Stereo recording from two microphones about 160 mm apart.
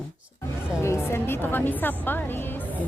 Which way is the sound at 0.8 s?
15° left (ahead or behind).